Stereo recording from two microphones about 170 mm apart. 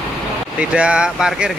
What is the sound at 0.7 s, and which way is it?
Speech, 5° right (ahead or behind).